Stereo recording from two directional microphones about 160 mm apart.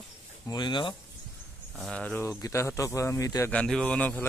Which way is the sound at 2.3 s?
20° left (ahead or behind).